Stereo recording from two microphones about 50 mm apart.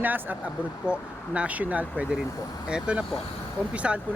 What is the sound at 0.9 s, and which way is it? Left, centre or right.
Speech, right.